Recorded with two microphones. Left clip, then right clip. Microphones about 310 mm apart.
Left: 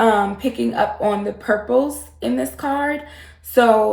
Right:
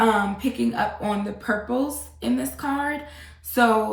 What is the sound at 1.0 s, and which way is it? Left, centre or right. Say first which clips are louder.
Speech: left 7 dB; centre.